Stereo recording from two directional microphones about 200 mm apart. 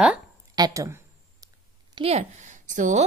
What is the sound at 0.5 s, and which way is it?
Speech, 20° right (ahead or behind).